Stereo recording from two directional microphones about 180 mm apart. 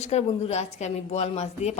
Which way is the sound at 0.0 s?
35° left (ahead or behind).